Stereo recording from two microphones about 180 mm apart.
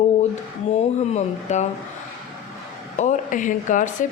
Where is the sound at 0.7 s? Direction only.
40° left (ahead or behind).